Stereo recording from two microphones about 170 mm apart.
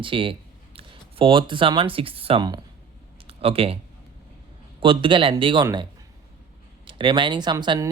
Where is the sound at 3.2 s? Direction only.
35° right (ahead or behind).